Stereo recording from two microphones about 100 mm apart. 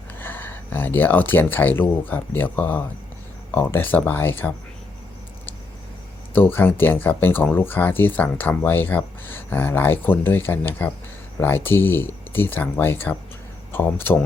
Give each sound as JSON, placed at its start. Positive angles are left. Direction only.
{"t": 0.2, "sound": "speech", "side_deg": 20}
{"t": 6.3, "sound": "speech", "side_deg": 20}